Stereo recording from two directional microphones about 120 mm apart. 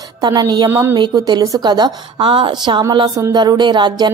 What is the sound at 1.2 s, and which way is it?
Speech, 30° right (ahead or behind).